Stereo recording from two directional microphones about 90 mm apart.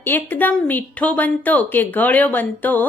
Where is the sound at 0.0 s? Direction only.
20° left (ahead or behind).